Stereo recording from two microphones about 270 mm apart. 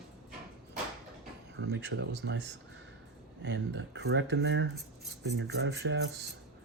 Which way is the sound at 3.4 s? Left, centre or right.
Right.